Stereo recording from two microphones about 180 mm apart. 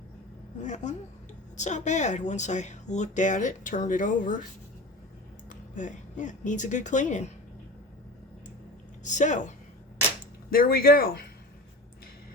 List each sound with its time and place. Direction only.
0.6 s speech: 40° left (ahead or behind)
5.5 s speech: 45° left (ahead or behind)
9.0 s speech: 45° left (ahead or behind)
10.5 s speech: 55° left (ahead or behind)